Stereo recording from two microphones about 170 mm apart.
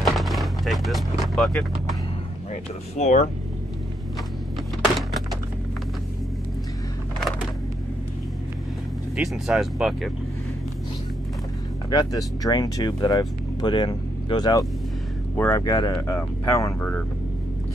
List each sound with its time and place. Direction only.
0.0 s vehicle: centre (ahead or behind)
3.0 s speech: 45° left (ahead or behind)
9.1 s speech: centre (ahead or behind)
11.9 s speech: 25° left (ahead or behind)
15.3 s speech: 10° left (ahead or behind)
15.6 s speech: 25° left (ahead or behind)